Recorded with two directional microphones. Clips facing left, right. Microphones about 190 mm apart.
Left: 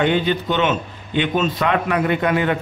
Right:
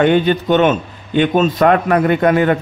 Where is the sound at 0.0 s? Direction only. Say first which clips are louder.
Right 6 dB; 50° right (ahead or behind).